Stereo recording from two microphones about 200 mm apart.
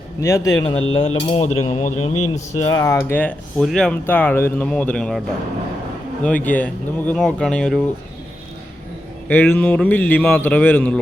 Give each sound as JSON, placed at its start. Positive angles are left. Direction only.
{"t": 0.2, "sound": "speech", "side_deg": 15}
{"t": 0.9, "sound": "cutlery", "side_deg": 30}
{"t": 2.7, "sound": "speech", "side_deg": 15}
{"t": 6.2, "sound": "speech", "side_deg": 5}
{"t": 9.3, "sound": "speech", "side_deg": 10}